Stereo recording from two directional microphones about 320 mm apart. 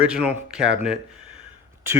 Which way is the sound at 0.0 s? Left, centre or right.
Centre.